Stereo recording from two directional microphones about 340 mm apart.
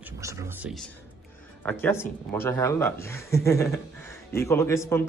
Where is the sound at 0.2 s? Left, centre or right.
Centre.